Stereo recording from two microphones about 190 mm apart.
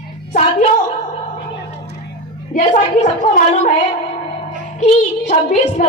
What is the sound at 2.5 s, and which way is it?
Speech, 40° left (ahead or behind).